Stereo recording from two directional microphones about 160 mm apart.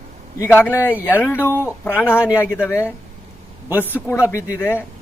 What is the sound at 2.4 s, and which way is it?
Speech, 15° left (ahead or behind).